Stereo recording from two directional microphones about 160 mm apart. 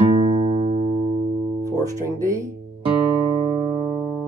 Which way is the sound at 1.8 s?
20° right (ahead or behind).